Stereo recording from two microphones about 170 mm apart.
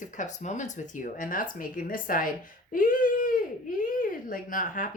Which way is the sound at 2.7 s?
55° left (ahead or behind).